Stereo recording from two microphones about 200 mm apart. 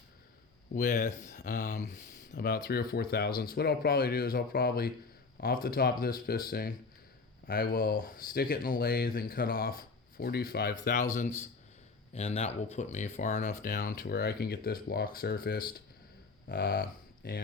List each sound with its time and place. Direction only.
0.7 s speech: 40° left (ahead or behind)
12.1 s speech: 35° left (ahead or behind); by 17.4 s 50° left (ahead or behind)